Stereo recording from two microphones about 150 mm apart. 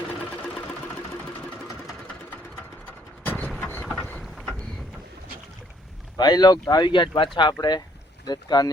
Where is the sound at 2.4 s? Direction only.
15° left (ahead or behind).